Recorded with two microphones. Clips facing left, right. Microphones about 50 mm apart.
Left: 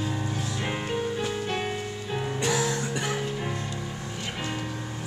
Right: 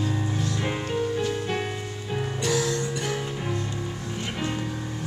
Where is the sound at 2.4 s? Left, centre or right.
Left.